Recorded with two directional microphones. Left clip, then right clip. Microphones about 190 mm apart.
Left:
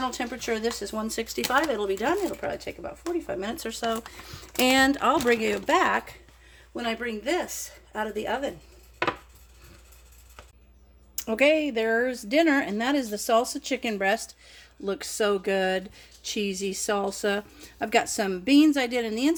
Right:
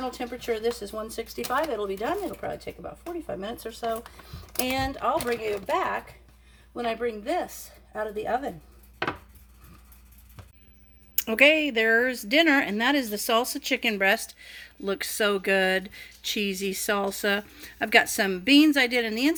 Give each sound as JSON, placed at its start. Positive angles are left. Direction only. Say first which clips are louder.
{"t": 0.0, "sound": "speech", "louder": "left 2 dB", "side_deg": 50}
{"t": 6.7, "sound": "speech", "louder": "right 2 dB", "side_deg": 40}
{"t": 11.1, "sound": "speech", "louder": "right 2 dB", "side_deg": 0}